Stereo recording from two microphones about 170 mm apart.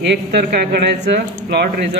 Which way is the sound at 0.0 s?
75° right (ahead or behind).